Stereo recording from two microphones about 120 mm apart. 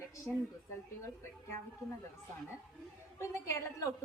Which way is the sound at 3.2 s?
25° left (ahead or behind).